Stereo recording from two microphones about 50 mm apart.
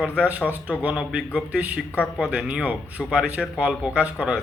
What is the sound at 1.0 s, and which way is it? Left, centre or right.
Speech, centre.